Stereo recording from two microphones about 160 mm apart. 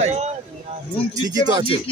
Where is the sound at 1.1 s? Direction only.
25° right (ahead or behind).